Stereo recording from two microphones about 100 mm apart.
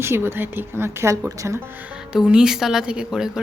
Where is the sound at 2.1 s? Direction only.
5° right (ahead or behind).